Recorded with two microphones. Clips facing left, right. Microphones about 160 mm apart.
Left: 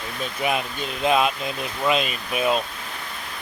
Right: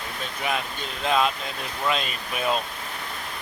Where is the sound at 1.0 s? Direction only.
15° left (ahead or behind).